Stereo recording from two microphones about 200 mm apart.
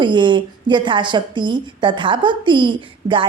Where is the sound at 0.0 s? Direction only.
25° right (ahead or behind).